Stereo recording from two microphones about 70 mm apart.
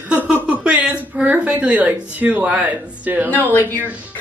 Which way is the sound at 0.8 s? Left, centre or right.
Right.